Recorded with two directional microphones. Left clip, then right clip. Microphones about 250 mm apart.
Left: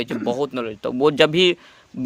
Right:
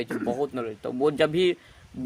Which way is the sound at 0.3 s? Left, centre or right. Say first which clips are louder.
Left 6 dB; left.